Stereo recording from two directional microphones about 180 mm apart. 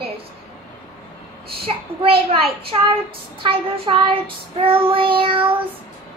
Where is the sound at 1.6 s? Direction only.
30° right (ahead or behind).